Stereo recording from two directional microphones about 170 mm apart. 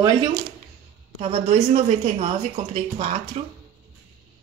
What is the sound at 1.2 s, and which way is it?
Speech, 45° right (ahead or behind).